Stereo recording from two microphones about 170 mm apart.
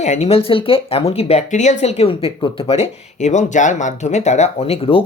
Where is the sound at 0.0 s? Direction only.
40° left (ahead or behind).